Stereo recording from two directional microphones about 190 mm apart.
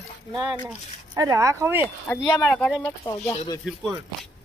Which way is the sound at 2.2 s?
20° left (ahead or behind).